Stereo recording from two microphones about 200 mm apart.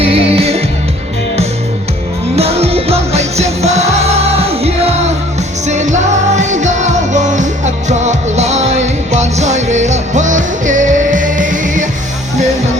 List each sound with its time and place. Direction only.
0.0 s music: 30° right (ahead or behind)
2.3 s music: 30° right (ahead or behind)